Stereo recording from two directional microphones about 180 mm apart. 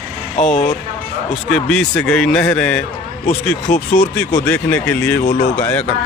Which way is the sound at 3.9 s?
5° left (ahead or behind).